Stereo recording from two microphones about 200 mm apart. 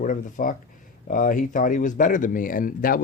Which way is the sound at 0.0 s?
40° left (ahead or behind).